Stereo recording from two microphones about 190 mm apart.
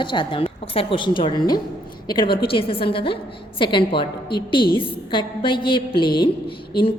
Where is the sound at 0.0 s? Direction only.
25° left (ahead or behind).